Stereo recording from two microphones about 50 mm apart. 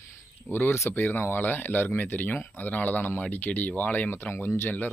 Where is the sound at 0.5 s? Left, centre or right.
Left.